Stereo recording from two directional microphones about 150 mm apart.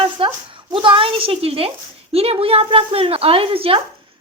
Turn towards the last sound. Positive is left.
turn(degrees=-40)  # may be behind; listen again after turning